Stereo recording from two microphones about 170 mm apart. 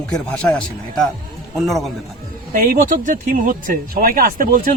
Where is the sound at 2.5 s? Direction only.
55° right (ahead or behind).